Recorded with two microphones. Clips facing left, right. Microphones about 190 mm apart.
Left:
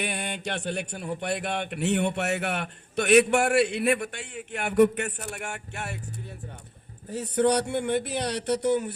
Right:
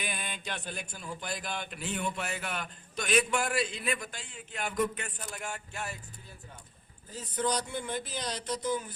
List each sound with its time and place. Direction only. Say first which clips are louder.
0.0 s speech: left 8 dB; 70° left (ahead or behind)
7.1 s speech: left 9 dB; 70° left (ahead or behind)